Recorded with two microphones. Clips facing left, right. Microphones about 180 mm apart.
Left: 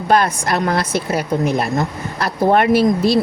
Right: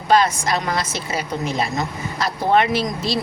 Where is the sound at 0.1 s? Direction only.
55° left (ahead or behind).